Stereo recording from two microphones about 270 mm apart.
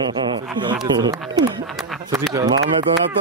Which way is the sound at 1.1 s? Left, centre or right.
Centre.